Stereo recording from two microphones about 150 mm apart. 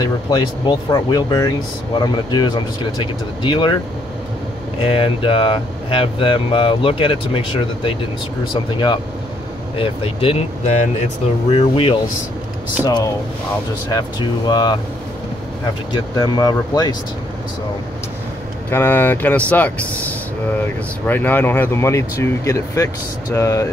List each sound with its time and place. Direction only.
0.0 s speech: 30° left (ahead or behind)
4.7 s speech: 40° left (ahead or behind)
11.5 s speech: 35° left (ahead or behind)
12.8 s speech: 20° left (ahead or behind)
15.9 s speech: 25° left (ahead or behind)
18.7 s speech: 15° left (ahead or behind)